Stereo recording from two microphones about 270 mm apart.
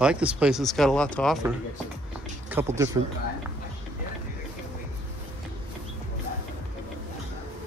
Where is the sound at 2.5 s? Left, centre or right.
Centre.